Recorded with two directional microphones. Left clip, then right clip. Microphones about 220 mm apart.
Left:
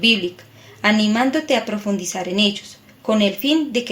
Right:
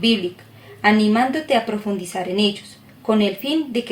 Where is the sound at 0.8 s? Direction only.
50° left (ahead or behind).